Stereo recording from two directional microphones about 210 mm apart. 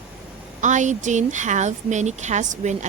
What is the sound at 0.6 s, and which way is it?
Speech, 35° right (ahead or behind).